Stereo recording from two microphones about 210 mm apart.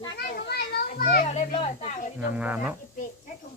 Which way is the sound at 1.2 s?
30° left (ahead or behind).